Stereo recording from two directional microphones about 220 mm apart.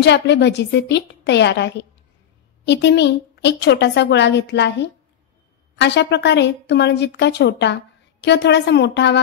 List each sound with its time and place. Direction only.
0.0 s speech: 50° left (ahead or behind)